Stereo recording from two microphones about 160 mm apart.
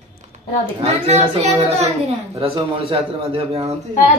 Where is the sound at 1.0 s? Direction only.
40° right (ahead or behind).